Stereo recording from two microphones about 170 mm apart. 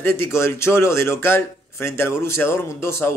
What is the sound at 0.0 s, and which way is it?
A man's voice, 15° left (ahead or behind).